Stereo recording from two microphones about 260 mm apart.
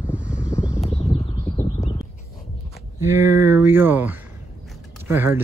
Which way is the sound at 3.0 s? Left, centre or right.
Centre.